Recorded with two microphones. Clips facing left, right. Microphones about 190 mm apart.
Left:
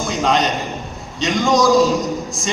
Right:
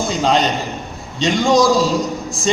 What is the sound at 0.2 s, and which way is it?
A man's voice, 30° right (ahead or behind).